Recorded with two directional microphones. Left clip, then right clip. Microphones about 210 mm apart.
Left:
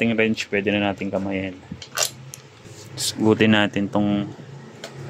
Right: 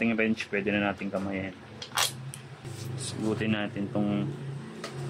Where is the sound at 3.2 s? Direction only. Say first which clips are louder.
Left 13 dB; 50° left (ahead or behind).